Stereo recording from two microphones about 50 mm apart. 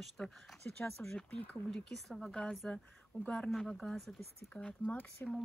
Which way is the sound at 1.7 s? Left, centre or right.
Centre.